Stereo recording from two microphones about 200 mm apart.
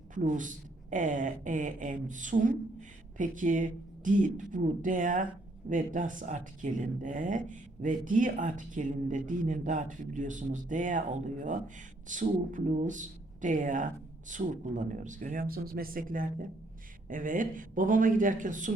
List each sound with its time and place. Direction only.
0.1 s speech: 40° right (ahead or behind)